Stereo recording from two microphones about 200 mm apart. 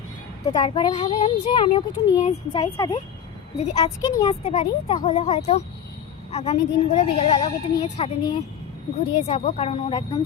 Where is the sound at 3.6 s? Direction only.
30° left (ahead or behind).